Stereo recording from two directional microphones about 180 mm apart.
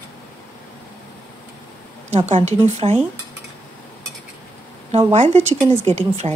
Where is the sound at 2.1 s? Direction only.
40° right (ahead or behind).